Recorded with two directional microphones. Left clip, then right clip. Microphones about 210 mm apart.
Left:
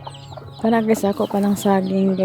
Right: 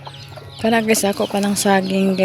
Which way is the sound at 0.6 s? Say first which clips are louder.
Right 2 dB; 10° left (ahead or behind).